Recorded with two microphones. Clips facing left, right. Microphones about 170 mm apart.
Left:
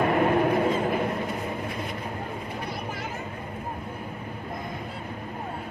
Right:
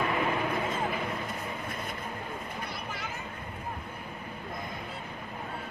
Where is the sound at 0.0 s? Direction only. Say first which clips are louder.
Left 8 dB; 50° left (ahead or behind).